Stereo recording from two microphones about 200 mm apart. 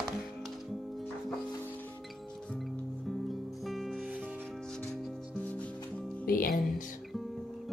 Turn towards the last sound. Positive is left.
turn(degrees=45)  # may be behind; listen again after turning